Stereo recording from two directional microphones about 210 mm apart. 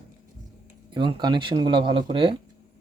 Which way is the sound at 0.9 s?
20° right (ahead or behind).